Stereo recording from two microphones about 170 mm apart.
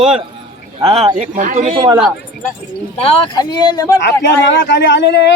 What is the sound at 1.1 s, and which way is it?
Speech, 45° right (ahead or behind).